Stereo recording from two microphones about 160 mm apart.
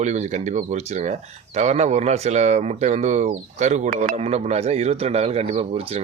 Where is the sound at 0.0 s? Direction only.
45° right (ahead or behind).